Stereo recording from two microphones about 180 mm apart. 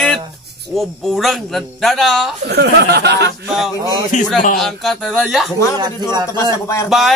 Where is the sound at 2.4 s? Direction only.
65° right (ahead or behind).